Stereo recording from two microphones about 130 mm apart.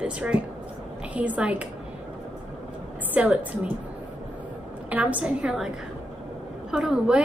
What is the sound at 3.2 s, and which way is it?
Speech, 10° right (ahead or behind).